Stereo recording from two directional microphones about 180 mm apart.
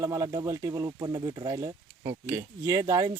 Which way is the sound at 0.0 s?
20° right (ahead or behind).